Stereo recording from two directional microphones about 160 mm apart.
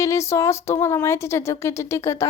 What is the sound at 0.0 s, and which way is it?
Speech, 20° left (ahead or behind).